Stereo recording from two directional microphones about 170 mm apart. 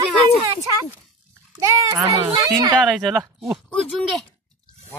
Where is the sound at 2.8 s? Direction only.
5° right (ahead or behind).